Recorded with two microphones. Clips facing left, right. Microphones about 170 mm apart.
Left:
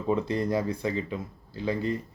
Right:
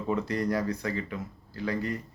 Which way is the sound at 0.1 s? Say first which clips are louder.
Left 2 dB; 25° left (ahead or behind).